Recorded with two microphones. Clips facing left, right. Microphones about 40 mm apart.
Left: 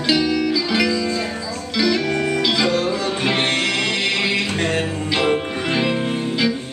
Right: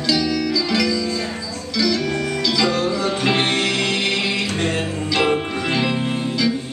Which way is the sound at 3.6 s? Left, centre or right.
Left.